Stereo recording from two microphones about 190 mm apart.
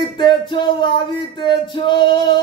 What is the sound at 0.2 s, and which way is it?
Music, 25° left (ahead or behind).